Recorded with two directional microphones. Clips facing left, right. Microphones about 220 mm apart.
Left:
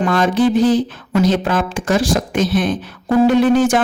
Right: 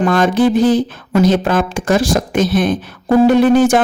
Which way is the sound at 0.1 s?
50° right (ahead or behind).